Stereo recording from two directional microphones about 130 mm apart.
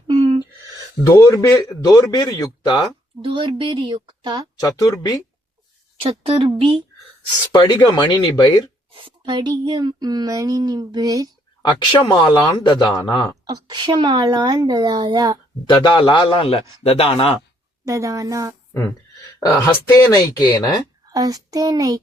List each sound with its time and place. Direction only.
0.1 s a sound: 40° right (ahead or behind)
1.0 s speech: 20° left (ahead or behind)
3.2 s speech: 40° right (ahead or behind)
4.8 s speech: 25° left (ahead or behind)
6.0 s a woman's voice: 45° right (ahead or behind)
7.5 s speech: 35° left (ahead or behind)
9.0 s speech: 40° right (ahead or behind)
11.6 s speech: 35° left (ahead or behind)
13.4 s speech: 30° right (ahead or behind)
15.7 s a man's voice: 40° left (ahead or behind)
17.8 s a child's voice: 25° right (ahead or behind)
19.5 s speech: 30° left (ahead or behind)
21.1 s a child's voice: 25° right (ahead or behind)